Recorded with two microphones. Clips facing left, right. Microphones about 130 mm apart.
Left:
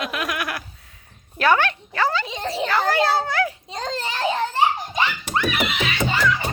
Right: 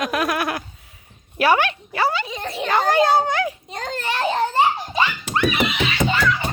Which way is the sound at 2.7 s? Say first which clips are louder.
Right 4 dB; 20° right (ahead or behind).